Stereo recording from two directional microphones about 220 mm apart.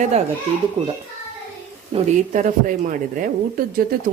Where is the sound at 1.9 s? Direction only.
35° right (ahead or behind).